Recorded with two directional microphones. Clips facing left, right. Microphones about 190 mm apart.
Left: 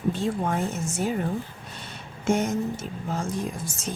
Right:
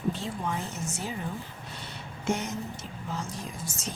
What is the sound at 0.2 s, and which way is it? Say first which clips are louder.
Speech: left 7 dB; 50° left (ahead or behind).